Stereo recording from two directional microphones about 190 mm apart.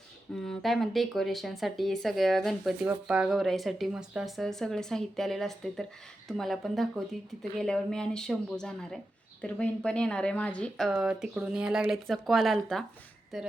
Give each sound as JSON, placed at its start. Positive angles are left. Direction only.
{"t": 0.4, "sound": "speech", "side_deg": 0}